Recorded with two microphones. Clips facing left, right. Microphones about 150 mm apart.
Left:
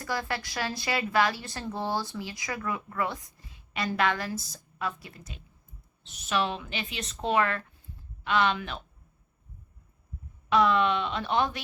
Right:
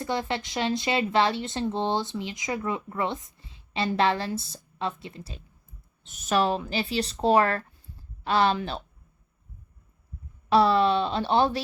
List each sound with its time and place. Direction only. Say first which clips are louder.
0.0 s speech: right 4 dB; 25° right (ahead or behind)
6.0 s speech: right 5 dB; 45° right (ahead or behind)
10.5 s speech: right 3 dB; 35° right (ahead or behind)